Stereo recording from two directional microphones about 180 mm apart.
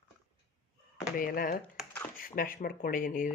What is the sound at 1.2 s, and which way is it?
Speech, 50° left (ahead or behind).